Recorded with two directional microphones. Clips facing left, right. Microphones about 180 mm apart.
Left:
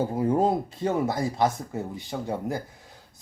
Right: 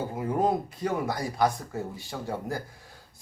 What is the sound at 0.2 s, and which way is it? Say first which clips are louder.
Speech: left 2 dB; 30° left (ahead or behind).